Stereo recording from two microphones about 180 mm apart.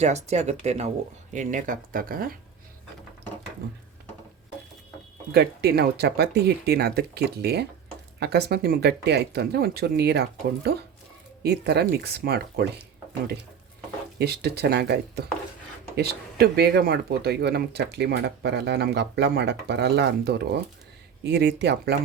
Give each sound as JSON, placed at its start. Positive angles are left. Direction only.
{"t": 0.0, "sound": "speech", "side_deg": -40}
{"t": 5.3, "sound": "speech", "side_deg": -65}
{"t": 14.2, "sound": "speech", "side_deg": -65}